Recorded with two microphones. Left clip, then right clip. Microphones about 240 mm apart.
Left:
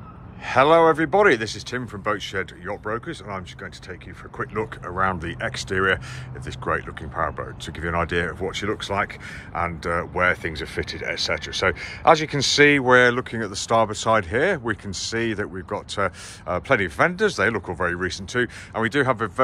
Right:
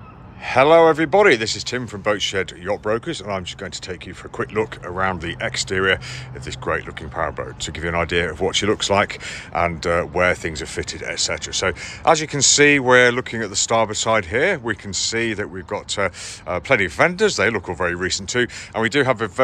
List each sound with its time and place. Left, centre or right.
0.5 s speech: centre